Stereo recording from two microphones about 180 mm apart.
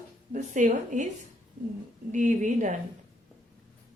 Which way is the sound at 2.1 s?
45° right (ahead or behind).